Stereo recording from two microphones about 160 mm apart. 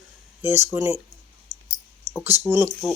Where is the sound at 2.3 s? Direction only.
15° right (ahead or behind).